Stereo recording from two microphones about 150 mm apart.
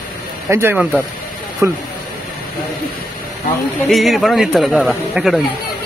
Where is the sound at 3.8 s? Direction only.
Centre (ahead or behind).